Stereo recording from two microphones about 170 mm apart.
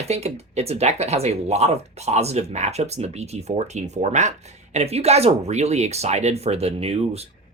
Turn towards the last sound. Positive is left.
turn(degrees=-35)  # may be behind; listen again after turning